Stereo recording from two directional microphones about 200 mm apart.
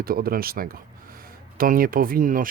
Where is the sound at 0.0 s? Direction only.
45° right (ahead or behind).